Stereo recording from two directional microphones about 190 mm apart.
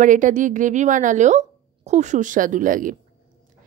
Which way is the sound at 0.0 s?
40° right (ahead or behind).